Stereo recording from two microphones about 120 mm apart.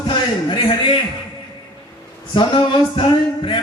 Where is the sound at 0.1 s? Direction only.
45° left (ahead or behind).